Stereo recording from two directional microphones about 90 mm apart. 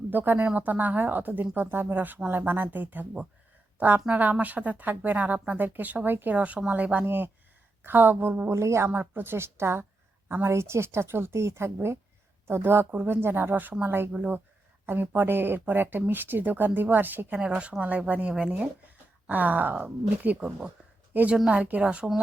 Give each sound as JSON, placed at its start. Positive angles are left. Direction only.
{"t": 0.1, "sound": "speech", "side_deg": -20}